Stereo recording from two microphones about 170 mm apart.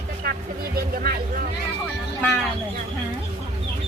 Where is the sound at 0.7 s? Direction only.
60° right (ahead or behind).